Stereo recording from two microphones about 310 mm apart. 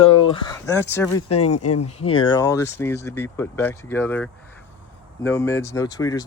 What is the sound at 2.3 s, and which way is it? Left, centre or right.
Speech, centre.